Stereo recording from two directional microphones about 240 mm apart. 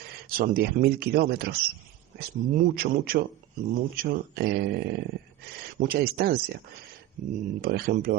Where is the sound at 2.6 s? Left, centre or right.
Right.